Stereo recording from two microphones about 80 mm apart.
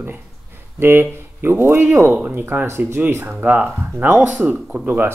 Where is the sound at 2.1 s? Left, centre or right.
Centre.